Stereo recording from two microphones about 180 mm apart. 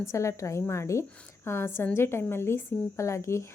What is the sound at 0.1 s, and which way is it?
Speech, 15° left (ahead or behind).